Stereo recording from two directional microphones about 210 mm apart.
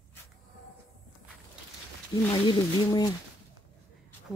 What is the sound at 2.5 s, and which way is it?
Speech, 20° left (ahead or behind).